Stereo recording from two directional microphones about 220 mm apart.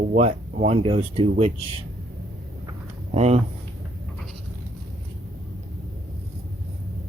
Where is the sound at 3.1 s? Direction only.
30° right (ahead or behind).